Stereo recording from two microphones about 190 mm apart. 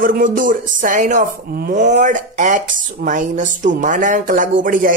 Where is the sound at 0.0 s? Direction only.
45° right (ahead or behind).